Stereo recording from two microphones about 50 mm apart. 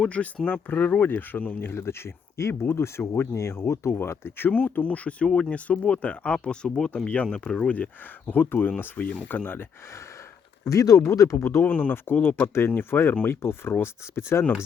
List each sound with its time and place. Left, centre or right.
0.0 s speech: left
1.7 s speech: left
4.5 s speech: left; by 7.7 s centre
8.3 s speech: left
10.7 s speech: left
11.6 s speech: left
12.0 s speech: left